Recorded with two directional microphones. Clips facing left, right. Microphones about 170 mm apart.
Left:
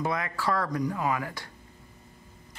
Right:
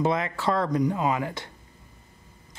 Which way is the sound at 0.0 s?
25° right (ahead or behind).